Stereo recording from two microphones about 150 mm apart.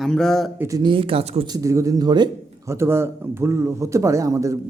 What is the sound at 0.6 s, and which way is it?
Speech, 25° right (ahead or behind).